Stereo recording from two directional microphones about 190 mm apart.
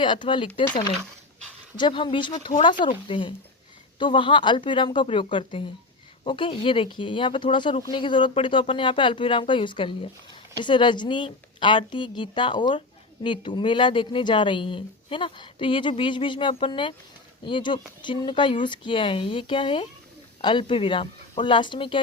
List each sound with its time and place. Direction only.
0.0 s speech: 25° left (ahead or behind)
1.7 s speech: 25° left (ahead or behind)